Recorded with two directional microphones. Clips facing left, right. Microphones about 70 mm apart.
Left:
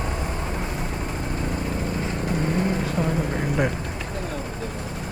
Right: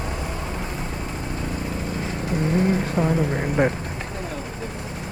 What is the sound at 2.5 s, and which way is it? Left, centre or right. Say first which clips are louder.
Vehicle: right 3 dB; right.